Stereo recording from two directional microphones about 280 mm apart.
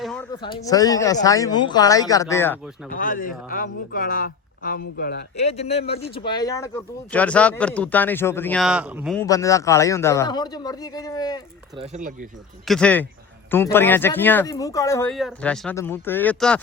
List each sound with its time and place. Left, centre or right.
0.0 s a sound: centre
0.3 s speech: centre
2.9 s speech: left
5.5 s speech: left; by 9.1 s centre
9.1 s speech: centre
11.8 s speech: right
12.6 s speech: centre